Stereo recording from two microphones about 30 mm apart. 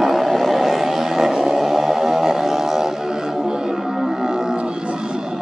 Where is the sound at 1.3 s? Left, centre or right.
Centre.